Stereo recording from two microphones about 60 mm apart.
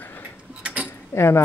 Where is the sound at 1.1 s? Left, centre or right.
Left.